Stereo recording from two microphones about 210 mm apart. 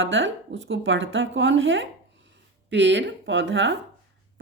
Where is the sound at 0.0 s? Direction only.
60° right (ahead or behind).